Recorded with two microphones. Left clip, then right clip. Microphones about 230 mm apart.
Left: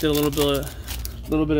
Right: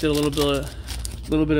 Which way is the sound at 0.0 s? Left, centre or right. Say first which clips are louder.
Even; centre.